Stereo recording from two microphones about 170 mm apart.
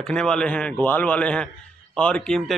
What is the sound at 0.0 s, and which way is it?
A man's voice, 5° left (ahead or behind).